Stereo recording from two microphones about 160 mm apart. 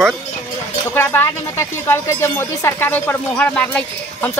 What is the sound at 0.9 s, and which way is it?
Speech, 15° left (ahead or behind).